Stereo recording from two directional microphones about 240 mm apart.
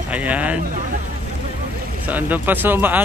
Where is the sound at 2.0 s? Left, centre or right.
Centre.